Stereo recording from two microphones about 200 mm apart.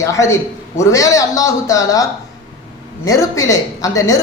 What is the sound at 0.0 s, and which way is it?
A man's voice, 15° left (ahead or behind).